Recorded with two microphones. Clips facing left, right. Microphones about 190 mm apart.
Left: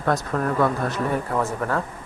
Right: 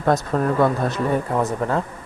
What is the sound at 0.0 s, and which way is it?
Speech, 25° right (ahead or behind).